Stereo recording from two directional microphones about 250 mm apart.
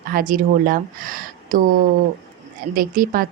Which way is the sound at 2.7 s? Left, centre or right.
Right.